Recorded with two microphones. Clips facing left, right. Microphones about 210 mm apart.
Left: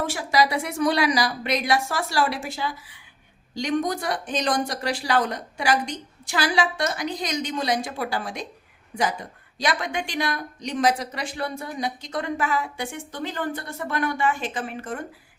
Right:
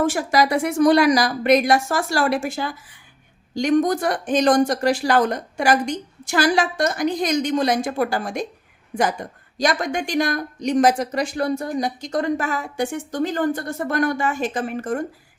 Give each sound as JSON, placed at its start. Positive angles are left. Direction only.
{"t": 0.0, "sound": "speech", "side_deg": -50}
{"t": 9.6, "sound": "speech", "side_deg": -45}